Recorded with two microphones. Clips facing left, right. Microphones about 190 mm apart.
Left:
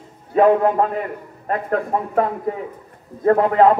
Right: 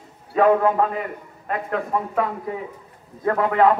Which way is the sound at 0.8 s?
45° left (ahead or behind).